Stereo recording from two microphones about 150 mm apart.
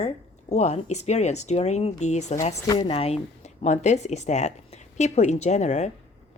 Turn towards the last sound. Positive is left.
turn(degrees=50)  # may be behind; listen again after turning